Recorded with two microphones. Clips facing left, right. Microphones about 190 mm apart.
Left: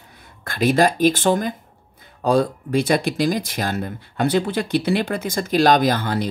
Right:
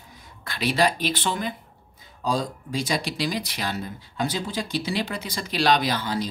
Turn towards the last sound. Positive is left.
turn(degrees=55)  # may be behind; listen again after turning